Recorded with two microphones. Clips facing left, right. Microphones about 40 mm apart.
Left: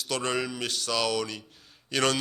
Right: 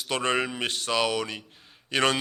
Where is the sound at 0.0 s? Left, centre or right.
Right.